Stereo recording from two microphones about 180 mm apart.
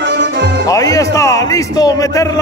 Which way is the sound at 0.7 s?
20° left (ahead or behind).